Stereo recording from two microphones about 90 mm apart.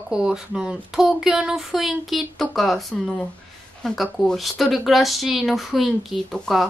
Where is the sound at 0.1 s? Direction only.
10° right (ahead or behind).